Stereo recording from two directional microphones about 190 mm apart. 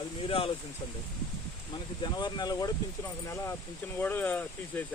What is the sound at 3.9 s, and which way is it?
Speech, 10° left (ahead or behind).